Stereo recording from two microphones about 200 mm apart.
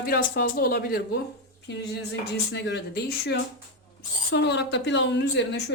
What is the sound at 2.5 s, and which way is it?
A woman's voice, 60° left (ahead or behind).